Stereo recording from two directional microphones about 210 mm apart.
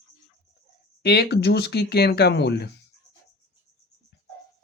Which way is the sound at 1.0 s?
50° left (ahead or behind).